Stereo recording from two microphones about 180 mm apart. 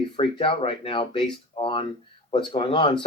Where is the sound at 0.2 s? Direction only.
30° left (ahead or behind).